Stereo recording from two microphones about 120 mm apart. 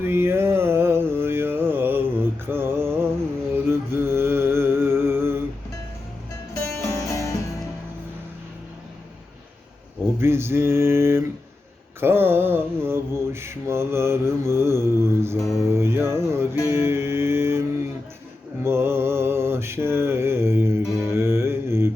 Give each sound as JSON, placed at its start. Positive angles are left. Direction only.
{"t": 0.0, "sound": "a sound", "side_deg": -20}
{"t": 3.5, "sound": "music", "side_deg": -20}
{"t": 6.5, "sound": "music", "side_deg": 25}
{"t": 10.2, "sound": "mantra", "side_deg": -20}
{"t": 15.7, "sound": "music", "side_deg": -20}
{"t": 18.6, "sound": "mantra", "side_deg": -20}
{"t": 21.0, "sound": "music", "side_deg": -20}